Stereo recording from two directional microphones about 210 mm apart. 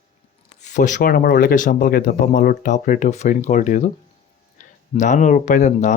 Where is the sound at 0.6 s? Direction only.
35° left (ahead or behind).